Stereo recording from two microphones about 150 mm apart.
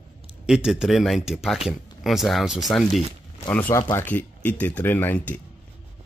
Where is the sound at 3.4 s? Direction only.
10° left (ahead or behind).